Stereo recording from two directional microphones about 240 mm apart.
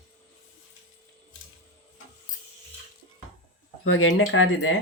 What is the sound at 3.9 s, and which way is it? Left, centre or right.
Speech, left.